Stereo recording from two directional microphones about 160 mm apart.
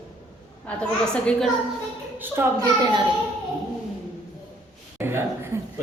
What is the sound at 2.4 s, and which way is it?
Speech, 15° right (ahead or behind).